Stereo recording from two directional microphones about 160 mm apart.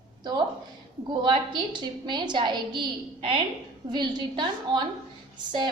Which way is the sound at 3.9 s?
30° right (ahead or behind).